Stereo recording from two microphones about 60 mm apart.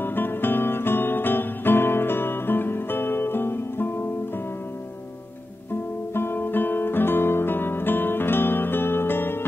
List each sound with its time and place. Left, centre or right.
0.0 s guitar: left
5.7 s guitar: left